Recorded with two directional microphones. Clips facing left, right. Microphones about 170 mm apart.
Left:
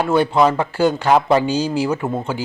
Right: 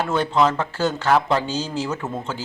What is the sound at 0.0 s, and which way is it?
Speech, 10° left (ahead or behind).